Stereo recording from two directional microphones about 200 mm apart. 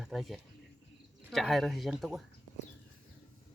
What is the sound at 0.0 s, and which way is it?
Speech, centre (ahead or behind).